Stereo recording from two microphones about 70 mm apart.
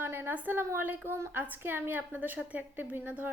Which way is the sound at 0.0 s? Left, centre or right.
Right.